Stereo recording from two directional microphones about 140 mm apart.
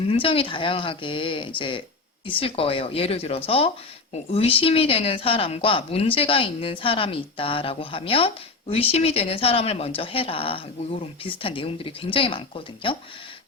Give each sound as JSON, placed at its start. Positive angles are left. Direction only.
{"t": 0.1, "sound": "a woman's voice", "side_deg": 40}